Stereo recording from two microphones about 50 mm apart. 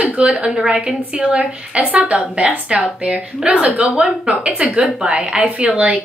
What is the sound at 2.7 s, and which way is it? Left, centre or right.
A woman's voice, centre.